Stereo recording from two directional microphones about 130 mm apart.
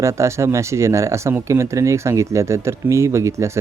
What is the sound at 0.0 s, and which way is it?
Speech, 20° right (ahead or behind).